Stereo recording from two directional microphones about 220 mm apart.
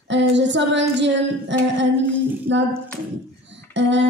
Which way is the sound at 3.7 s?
55° right (ahead or behind).